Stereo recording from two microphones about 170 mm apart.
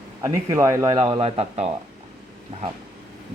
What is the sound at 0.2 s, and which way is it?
A man's voice, 20° right (ahead or behind).